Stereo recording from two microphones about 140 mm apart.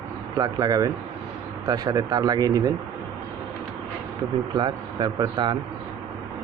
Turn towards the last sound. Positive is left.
turn(degrees=-30)  # may be behind; listen again after turning